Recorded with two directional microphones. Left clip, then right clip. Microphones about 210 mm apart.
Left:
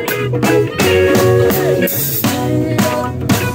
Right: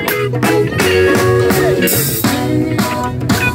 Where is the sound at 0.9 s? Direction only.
35° right (ahead or behind).